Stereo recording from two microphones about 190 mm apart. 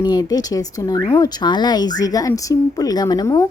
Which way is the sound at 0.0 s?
20° left (ahead or behind).